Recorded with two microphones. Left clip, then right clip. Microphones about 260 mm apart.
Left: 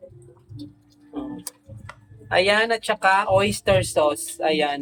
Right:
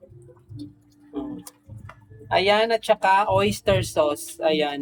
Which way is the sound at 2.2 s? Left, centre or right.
Centre.